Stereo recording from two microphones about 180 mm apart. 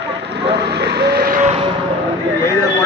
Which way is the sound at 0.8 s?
60° right (ahead or behind).